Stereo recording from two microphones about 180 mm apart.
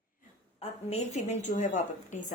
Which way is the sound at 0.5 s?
35° left (ahead or behind).